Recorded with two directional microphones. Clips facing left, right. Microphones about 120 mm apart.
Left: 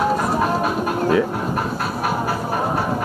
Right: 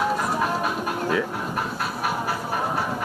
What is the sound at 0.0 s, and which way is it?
Music, 35° left (ahead or behind).